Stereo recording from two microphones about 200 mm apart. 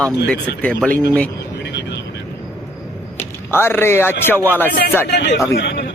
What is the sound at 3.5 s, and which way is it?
A man's voice, 10° left (ahead or behind).